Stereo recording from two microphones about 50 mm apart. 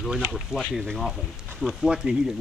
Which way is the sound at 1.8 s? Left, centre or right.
Centre.